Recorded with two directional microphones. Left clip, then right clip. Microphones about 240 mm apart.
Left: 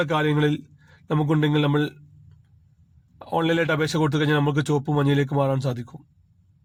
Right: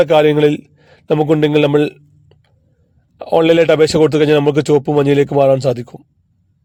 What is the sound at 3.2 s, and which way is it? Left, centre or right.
Speech, right.